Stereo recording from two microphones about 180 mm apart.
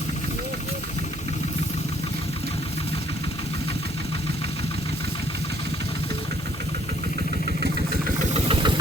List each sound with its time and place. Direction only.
7.6 s vehicle: 50° right (ahead or behind)
8.3 s vehicle: 30° right (ahead or behind)